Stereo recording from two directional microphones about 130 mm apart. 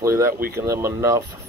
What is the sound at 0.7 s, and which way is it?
Speech, 20° right (ahead or behind).